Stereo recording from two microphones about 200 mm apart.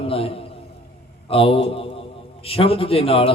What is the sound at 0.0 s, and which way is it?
A man's voice, 30° left (ahead or behind).